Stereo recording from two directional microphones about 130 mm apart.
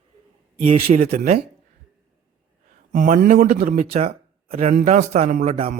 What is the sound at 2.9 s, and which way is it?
Speech, 80° right.